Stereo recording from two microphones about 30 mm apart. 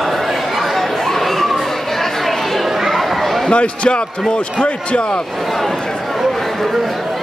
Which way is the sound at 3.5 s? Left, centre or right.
Left.